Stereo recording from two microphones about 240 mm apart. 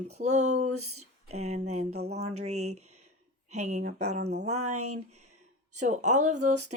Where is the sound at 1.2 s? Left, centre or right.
Right.